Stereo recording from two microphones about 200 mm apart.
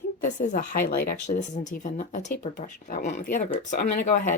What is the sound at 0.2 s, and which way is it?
Speech, 40° left (ahead or behind).